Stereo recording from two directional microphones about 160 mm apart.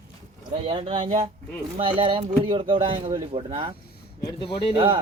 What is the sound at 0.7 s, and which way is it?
Speech, 35° right (ahead or behind).